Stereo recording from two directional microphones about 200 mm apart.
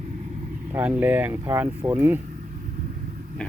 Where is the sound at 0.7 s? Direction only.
10° right (ahead or behind).